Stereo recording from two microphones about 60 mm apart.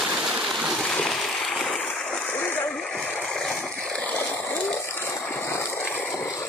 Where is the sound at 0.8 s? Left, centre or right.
Centre.